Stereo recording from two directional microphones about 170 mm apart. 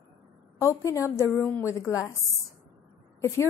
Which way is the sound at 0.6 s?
15° left (ahead or behind).